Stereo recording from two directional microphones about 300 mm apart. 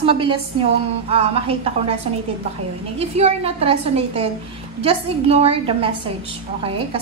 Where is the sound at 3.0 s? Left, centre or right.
Right.